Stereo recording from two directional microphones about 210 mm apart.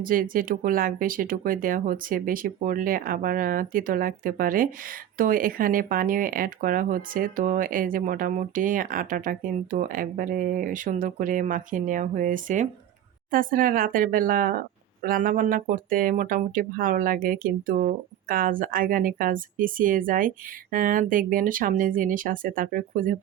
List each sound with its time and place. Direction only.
0.0 s speech: 40° right (ahead or behind)